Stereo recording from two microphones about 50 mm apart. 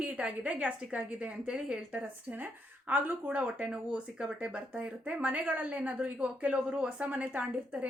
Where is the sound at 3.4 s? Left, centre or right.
Right.